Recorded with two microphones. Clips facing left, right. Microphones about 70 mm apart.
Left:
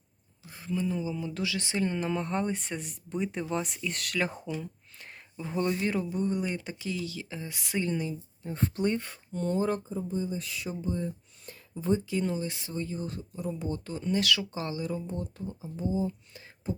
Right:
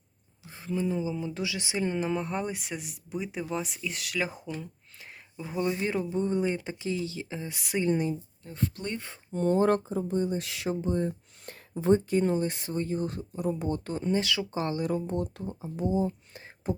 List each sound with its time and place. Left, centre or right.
0.4 s speech: right
7.9 s speech: right
8.4 s speech: left
9.3 s speech: right
9.6 s speech: right
14.0 s speech: right
14.5 s speech: right
16.0 s a sound: right